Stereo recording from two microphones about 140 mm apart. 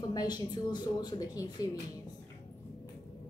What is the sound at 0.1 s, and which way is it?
A woman's voice, 30° left (ahead or behind).